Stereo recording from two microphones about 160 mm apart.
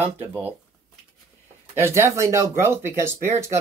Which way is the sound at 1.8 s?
15° right (ahead or behind).